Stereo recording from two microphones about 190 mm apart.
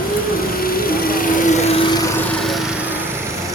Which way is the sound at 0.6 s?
50° left (ahead or behind).